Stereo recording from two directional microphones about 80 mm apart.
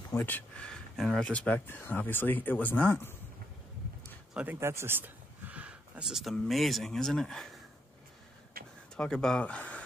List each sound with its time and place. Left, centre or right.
0.1 s speech: left
0.6 s speech: centre
1.3 s speech: centre
1.7 s speech: left
4.6 s speech: right; by 7.5 s centre
8.9 s speech: centre